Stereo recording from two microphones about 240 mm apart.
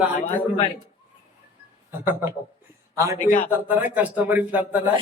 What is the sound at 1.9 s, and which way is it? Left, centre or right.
A man's voice, centre.